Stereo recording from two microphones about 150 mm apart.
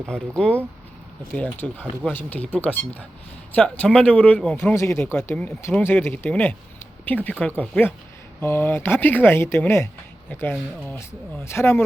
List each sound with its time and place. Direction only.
0.0 s speech: 5° left (ahead or behind)